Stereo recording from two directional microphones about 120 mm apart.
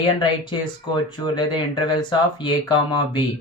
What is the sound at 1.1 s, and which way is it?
Speech, 40° left (ahead or behind).